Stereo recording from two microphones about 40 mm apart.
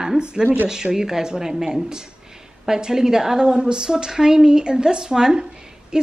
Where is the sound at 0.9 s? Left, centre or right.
Centre.